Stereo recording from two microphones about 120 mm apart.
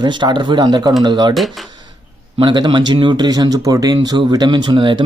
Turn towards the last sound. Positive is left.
turn(degrees=-40)  # may be behind; listen again after turning